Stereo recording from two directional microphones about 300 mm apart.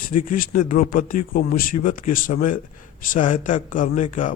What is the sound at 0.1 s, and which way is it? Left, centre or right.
Speech, left.